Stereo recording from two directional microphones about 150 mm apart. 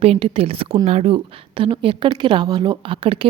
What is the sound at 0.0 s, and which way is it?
A woman's voice, 40° right (ahead or behind).